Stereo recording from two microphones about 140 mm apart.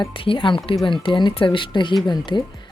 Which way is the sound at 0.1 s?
40° left (ahead or behind).